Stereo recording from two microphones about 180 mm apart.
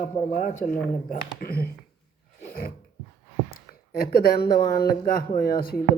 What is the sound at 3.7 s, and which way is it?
Speech, 60° left (ahead or behind).